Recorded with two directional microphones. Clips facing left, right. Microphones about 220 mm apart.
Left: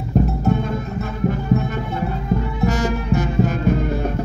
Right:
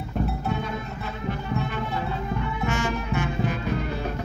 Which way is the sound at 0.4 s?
45° left (ahead or behind).